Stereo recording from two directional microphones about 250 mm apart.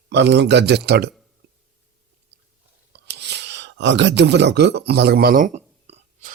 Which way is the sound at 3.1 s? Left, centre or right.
Right.